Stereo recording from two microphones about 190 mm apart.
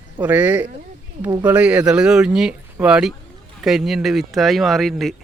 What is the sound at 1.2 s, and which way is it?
Speech, 20° right (ahead or behind).